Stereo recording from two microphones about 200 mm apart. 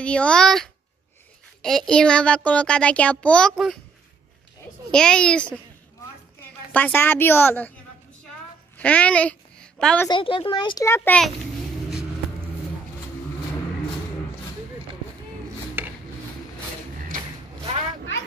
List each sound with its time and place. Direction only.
0.0 s a child's voice: 5° left (ahead or behind)
4.9 s a child's voice: 5° left (ahead or behind)
6.7 s a woman's voice: 10° left (ahead or behind)
8.7 s a sound: 5° left (ahead or behind)
10.0 s a child's voice: 25° left (ahead or behind); by 11.3 s 5° left (ahead or behind)
15.8 s a sound: 10° right (ahead or behind)